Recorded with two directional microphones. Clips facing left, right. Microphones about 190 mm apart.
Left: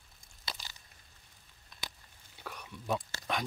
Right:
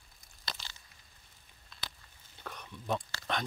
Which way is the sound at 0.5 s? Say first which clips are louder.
Even; 15° left (ahead or behind).